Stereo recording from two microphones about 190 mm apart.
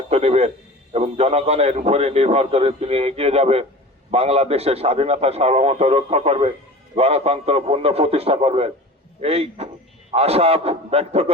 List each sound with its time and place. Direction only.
0.1 s a man's voice: 35° right (ahead or behind)